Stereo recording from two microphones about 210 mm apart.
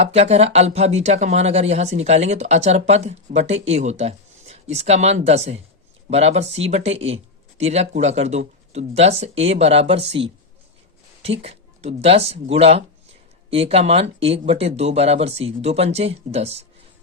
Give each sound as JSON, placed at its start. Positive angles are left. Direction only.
{"t": 0.0, "sound": "speech", "side_deg": -30}